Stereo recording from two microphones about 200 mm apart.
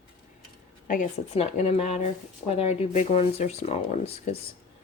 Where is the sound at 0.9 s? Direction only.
35° left (ahead or behind).